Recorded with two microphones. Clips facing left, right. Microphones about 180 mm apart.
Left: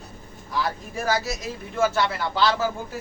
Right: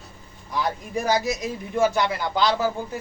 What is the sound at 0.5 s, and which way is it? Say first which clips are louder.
Speech: right 2 dB; 20° right (ahead or behind).